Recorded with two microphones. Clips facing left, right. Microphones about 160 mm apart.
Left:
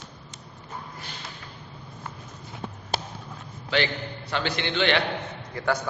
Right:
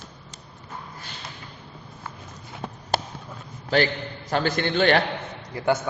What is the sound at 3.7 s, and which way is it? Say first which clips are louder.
A man's voice: right 4 dB; 40° right (ahead or behind).